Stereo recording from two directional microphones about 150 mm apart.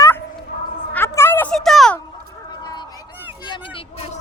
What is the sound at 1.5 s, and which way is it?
Speech, centre (ahead or behind).